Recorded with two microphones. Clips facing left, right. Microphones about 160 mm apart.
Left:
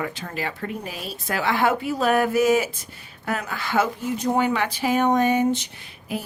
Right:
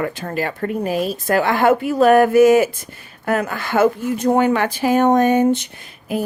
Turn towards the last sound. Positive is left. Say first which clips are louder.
# right 7 dB
turn(degrees=-50)  # may be behind; listen again after turning